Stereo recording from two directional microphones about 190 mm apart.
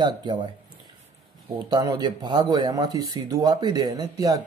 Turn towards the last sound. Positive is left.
turn(degrees=-20)  # may be behind; listen again after turning